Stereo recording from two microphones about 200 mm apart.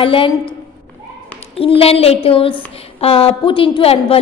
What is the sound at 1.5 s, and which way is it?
A woman's voice, 30° left (ahead or behind).